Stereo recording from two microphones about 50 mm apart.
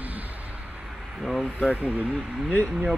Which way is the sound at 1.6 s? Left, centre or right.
Right.